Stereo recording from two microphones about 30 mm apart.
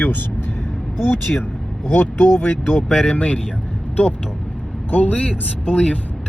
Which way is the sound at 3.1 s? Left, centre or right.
Left.